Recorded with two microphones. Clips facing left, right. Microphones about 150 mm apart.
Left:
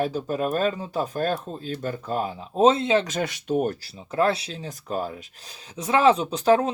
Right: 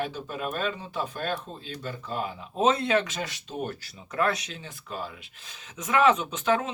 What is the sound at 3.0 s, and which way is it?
Speech, 45° left (ahead or behind).